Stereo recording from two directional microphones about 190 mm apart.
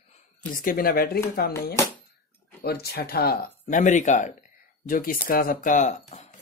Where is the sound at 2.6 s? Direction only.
55° left (ahead or behind).